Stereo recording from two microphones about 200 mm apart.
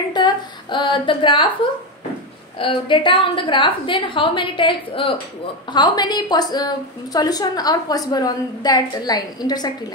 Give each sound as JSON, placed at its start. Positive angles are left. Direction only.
{"t": 0.1, "sound": "a woman's voice", "side_deg": 25}
{"t": 2.6, "sound": "a woman's voice", "side_deg": 25}